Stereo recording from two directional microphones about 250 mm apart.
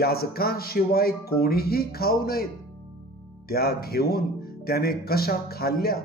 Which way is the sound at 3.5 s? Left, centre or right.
Left.